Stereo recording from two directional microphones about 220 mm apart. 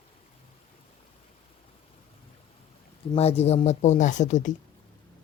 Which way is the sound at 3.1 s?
30° left (ahead or behind).